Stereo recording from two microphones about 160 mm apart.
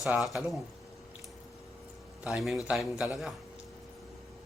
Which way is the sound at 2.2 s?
Centre (ahead or behind).